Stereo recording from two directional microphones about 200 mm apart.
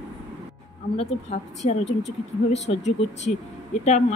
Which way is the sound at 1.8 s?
65° left (ahead or behind).